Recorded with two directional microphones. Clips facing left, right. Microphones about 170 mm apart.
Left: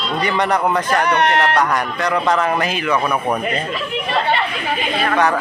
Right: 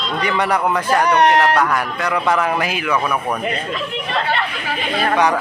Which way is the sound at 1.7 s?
5° right (ahead or behind).